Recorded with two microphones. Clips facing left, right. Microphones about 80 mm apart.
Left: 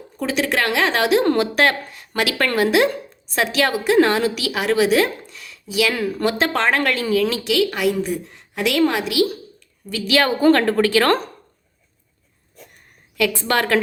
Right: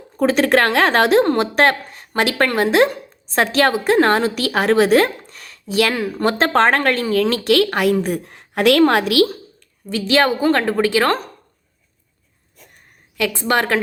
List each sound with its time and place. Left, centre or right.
0.2 s a woman's voice: right
1.2 s a woman's voice: right
5.9 s a woman's voice: right
6.2 s a woman's voice: right
9.9 s a woman's voice: right
13.1 s a woman's voice: right